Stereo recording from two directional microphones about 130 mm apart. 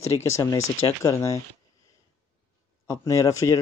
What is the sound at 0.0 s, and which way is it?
Speech, 20° left (ahead or behind).